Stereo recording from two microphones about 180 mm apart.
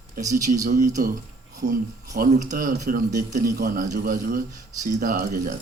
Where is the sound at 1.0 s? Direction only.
50° right (ahead or behind).